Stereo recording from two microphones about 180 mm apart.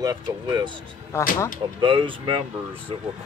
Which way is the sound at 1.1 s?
15° left (ahead or behind).